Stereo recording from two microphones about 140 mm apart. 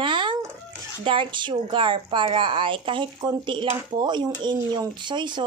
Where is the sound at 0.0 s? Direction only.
35° right (ahead or behind).